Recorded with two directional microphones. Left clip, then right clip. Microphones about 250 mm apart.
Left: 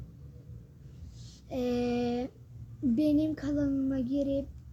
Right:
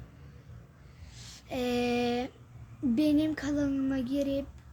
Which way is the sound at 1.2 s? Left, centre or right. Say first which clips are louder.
Even; centre.